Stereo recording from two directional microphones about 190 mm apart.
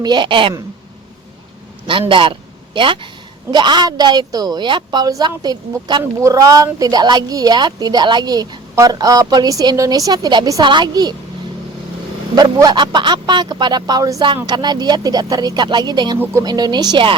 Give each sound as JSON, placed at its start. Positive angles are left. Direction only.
{"t": 0.0, "sound": "a woman's voice", "side_deg": -25}
{"t": 1.9, "sound": "a man's voice", "side_deg": -25}
{"t": 12.4, "sound": "a woman's voice", "side_deg": -20}